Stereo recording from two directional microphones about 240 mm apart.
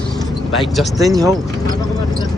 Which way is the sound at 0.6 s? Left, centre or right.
Centre.